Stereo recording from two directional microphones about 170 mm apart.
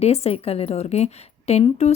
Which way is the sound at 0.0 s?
40° left (ahead or behind).